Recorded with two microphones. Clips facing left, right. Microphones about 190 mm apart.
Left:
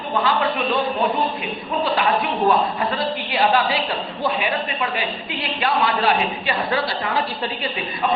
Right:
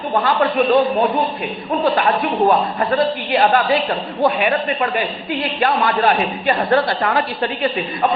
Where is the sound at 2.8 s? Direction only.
50° right (ahead or behind).